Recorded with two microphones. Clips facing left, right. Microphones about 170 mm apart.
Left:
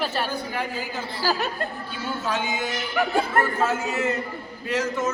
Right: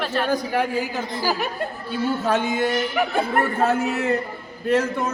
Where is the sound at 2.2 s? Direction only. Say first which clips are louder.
Right 4 dB; 60° right (ahead or behind).